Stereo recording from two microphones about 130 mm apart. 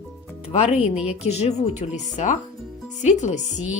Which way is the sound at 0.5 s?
55° left (ahead or behind).